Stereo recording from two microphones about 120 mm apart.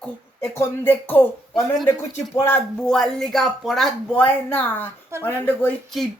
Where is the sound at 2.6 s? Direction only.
5° left (ahead or behind).